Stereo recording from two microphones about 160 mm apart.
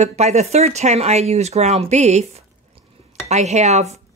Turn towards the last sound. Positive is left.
turn(degrees=-45)  # may be behind; listen again after turning